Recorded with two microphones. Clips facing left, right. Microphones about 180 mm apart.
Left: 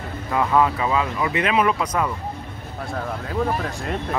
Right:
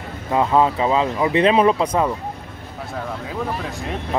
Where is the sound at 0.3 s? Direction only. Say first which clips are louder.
Right 2 dB; 25° right (ahead or behind).